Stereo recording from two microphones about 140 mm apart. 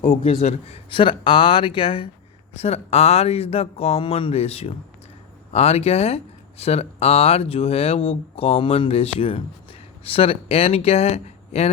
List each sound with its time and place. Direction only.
0.0 s speech: 65° left (ahead or behind)
0.3 s speech: 45° left (ahead or behind)